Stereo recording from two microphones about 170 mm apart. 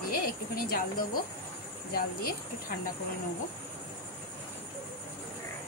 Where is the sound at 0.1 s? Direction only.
60° left (ahead or behind).